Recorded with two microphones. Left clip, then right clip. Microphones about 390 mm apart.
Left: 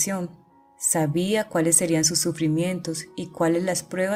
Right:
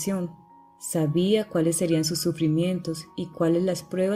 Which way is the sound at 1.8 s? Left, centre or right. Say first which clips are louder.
Left 2 dB; centre.